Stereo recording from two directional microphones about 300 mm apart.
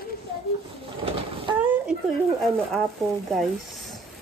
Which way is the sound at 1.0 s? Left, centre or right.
Centre.